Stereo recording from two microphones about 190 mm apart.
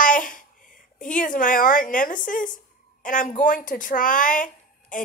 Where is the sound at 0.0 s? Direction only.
45° left (ahead or behind).